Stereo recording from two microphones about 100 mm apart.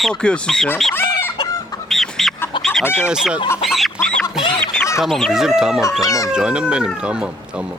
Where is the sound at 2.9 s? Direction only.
5° right (ahead or behind).